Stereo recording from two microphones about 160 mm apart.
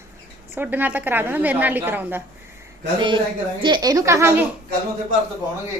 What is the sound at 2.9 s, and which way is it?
A woman's voice, 30° right (ahead or behind).